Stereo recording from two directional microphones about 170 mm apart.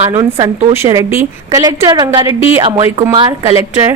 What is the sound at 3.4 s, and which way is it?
Speech, 15° right (ahead or behind).